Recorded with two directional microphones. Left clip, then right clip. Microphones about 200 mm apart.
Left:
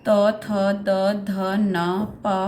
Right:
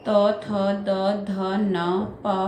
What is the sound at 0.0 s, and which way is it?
Speech, 35° left (ahead or behind).